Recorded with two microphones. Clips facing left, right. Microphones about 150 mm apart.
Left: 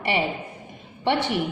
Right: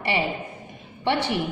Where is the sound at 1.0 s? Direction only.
25° left (ahead or behind).